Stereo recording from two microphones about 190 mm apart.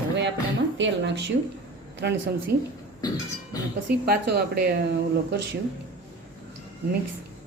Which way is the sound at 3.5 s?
20° left (ahead or behind).